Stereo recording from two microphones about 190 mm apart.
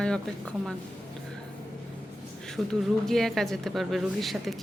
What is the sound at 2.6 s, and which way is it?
Speech, 5° right (ahead or behind).